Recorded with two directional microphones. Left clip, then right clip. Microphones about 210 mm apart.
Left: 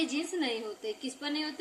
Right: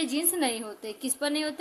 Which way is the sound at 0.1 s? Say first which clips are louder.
Right 4 dB; 50° right (ahead or behind).